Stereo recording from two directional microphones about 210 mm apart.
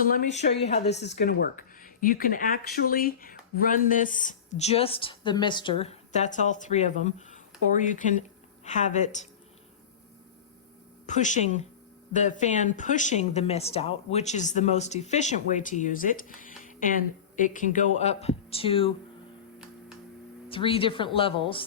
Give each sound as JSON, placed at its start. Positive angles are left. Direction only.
{"t": 0.0, "sound": "speech", "side_deg": 35}
{"t": 0.9, "sound": "speech", "side_deg": 55}
{"t": 8.6, "sound": "speech", "side_deg": 35}
{"t": 11.0, "sound": "a woman's voice", "side_deg": 35}
{"t": 20.5, "sound": "a woman's voice", "side_deg": 25}